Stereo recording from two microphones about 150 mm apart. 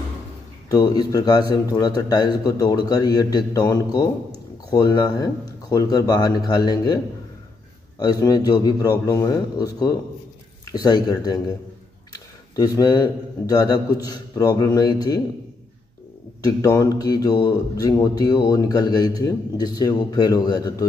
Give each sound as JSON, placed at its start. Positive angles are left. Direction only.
{"t": 0.7, "sound": "speech", "side_deg": 25}
{"t": 8.0, "sound": "speech", "side_deg": 25}
{"t": 16.4, "sound": "speech", "side_deg": 25}